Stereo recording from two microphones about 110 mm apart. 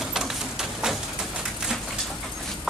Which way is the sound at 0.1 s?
5° right (ahead or behind).